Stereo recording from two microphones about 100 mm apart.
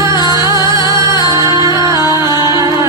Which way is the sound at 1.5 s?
40° right (ahead or behind).